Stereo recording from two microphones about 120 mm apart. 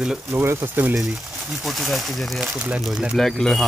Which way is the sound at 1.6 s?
Centre (ahead or behind).